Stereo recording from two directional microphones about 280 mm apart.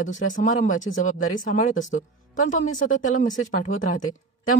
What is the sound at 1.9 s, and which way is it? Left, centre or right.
Speech, left.